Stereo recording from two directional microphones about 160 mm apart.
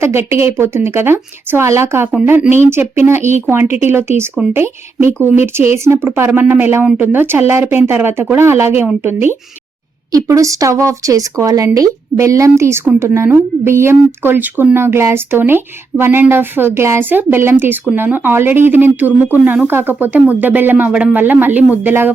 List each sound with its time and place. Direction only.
0.0 s speech: 15° right (ahead or behind)